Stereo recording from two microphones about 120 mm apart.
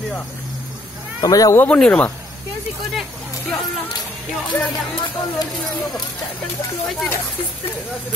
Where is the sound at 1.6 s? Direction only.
10° left (ahead or behind).